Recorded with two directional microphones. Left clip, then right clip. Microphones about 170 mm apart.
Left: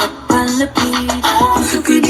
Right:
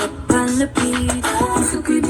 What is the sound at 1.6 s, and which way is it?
Music, 5° left (ahead or behind).